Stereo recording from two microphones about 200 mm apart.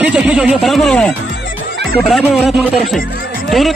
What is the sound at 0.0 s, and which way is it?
A man's voice, 5° right (ahead or behind).